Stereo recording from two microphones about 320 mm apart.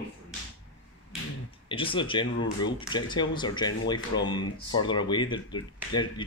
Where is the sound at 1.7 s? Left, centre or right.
Centre.